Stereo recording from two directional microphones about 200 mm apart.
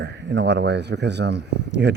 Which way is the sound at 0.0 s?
60° right (ahead or behind).